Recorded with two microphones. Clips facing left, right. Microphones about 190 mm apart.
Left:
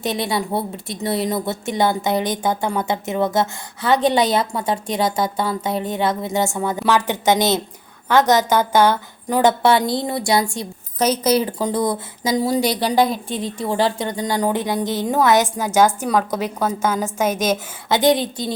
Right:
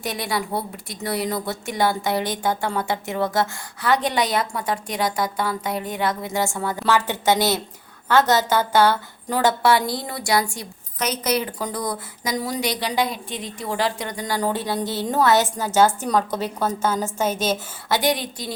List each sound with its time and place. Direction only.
0.0 s a woman's voice: 25° left (ahead or behind)